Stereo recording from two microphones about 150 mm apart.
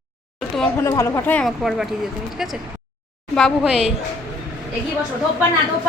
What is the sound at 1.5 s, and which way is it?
Speech, centre (ahead or behind).